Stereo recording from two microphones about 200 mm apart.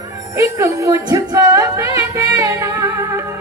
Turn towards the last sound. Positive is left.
turn(degrees=-15)  # may be behind; listen again after turning